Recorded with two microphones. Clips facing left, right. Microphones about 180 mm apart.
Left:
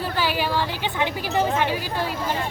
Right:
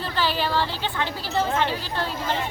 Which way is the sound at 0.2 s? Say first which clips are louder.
Right 1 dB; 10° left (ahead or behind).